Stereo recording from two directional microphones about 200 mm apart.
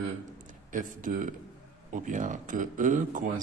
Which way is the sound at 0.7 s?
40° right (ahead or behind).